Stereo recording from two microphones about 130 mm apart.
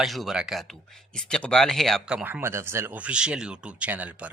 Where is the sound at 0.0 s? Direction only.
Centre (ahead or behind).